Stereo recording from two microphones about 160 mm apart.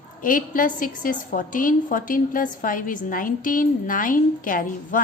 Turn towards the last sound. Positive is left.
turn(degrees=60)  # may be behind; listen again after turning